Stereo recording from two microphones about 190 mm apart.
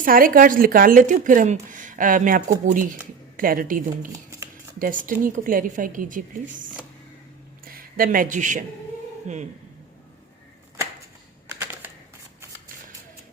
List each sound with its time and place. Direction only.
0.0 s a woman's voice: 50° right (ahead or behind)
4.1 s shuffling cards: 15° right (ahead or behind)
4.8 s a woman's voice: 45° right (ahead or behind)
11.6 s shuffling cards: 10° right (ahead or behind)